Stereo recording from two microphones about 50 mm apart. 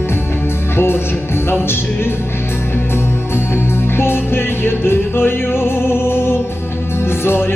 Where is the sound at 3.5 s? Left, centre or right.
Left.